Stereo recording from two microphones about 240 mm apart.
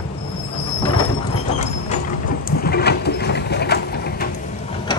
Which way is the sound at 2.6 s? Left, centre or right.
Left.